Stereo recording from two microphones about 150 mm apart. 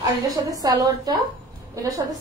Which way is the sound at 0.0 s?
25° right (ahead or behind).